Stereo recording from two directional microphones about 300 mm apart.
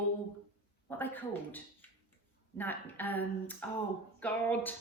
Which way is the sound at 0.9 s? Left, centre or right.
Centre.